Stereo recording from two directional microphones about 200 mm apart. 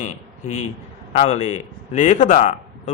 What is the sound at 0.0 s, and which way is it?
A man's voice, 35° left (ahead or behind).